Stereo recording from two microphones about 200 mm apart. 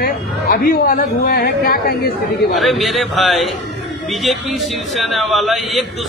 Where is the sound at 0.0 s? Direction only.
45° left (ahead or behind).